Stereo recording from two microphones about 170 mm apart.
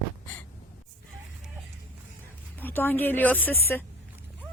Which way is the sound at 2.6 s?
10° left (ahead or behind).